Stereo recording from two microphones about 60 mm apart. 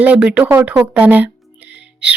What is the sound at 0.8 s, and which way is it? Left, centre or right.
Music, right.